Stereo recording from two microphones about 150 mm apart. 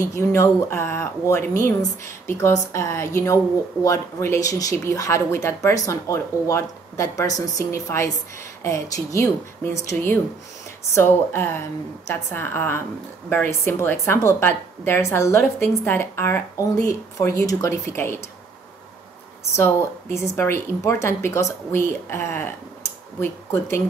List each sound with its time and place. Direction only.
0.0 s a woman's voice: 20° left (ahead or behind)
19.5 s a woman's voice: 15° left (ahead or behind)